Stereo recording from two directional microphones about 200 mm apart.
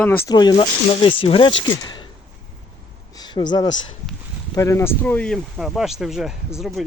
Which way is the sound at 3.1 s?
20° left (ahead or behind).